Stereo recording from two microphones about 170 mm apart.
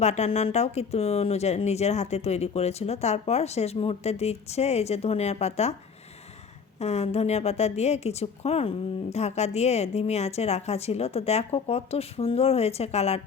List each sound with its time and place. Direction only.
0.0 s a woman's voice: 40° left (ahead or behind)
6.7 s a woman's voice: 40° left (ahead or behind)